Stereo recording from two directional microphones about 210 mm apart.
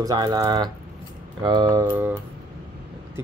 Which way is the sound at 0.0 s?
20° right (ahead or behind).